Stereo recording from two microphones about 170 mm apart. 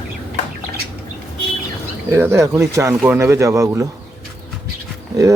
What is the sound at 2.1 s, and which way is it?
Speech, 15° right (ahead or behind).